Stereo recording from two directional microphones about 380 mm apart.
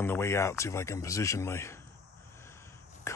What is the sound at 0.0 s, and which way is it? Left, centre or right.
Speech, centre.